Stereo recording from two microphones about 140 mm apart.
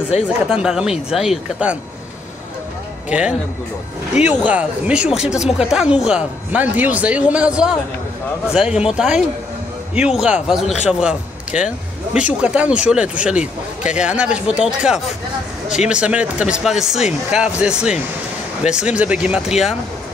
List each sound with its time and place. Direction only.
0.1 s speech: 50° left (ahead or behind)
0.5 s speech: 5° right (ahead or behind)
3.1 s speech: 10° right (ahead or behind)
4.2 s speech: 50° left (ahead or behind)
4.5 s speech: 10° right (ahead or behind)